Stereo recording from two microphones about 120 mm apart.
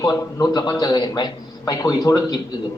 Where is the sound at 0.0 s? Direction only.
35° left (ahead or behind).